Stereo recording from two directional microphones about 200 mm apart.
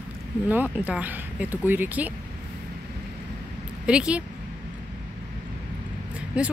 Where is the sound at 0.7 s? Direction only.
5° right (ahead or behind).